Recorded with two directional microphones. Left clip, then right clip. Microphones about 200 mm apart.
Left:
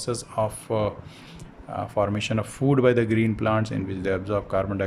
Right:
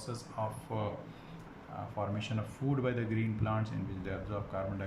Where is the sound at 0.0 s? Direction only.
50° left (ahead or behind).